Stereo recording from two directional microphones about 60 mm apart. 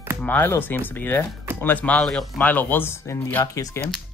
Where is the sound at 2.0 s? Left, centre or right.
Centre.